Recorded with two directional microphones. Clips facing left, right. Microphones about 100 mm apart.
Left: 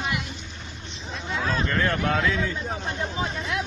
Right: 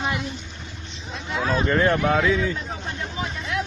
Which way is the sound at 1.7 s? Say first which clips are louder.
Right 7 dB; 25° right (ahead or behind).